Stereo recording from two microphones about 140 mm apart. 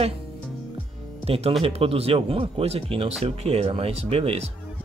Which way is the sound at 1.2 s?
45° right (ahead or behind).